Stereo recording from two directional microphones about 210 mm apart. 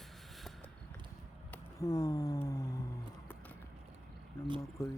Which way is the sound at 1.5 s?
15° left (ahead or behind).